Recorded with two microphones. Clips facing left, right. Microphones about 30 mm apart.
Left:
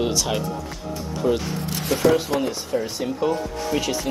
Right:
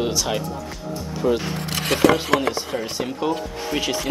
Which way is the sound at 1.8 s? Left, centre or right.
Right.